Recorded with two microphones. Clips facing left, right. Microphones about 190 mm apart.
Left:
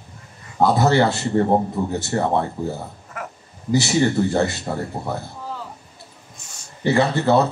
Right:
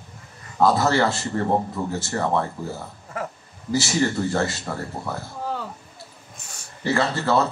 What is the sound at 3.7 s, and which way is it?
Speech, 20° left (ahead or behind).